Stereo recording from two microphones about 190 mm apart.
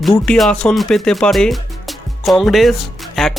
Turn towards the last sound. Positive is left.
turn(degrees=0)  # may be behind; listen again after turning